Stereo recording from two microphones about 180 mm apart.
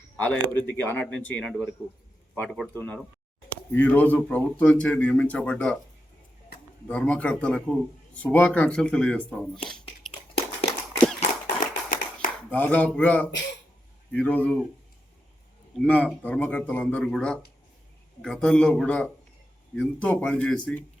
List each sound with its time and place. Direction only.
0.2 s speech: 10° left (ahead or behind)
6.8 s speech: 5° left (ahead or behind)
10.1 s a sound: 35° left (ahead or behind)
11.4 s tap: 45° left (ahead or behind)
12.5 s speech: 10° left (ahead or behind)
15.9 s speech: 10° left (ahead or behind)